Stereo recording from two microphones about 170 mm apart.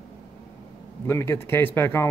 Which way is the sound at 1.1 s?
15° left (ahead or behind).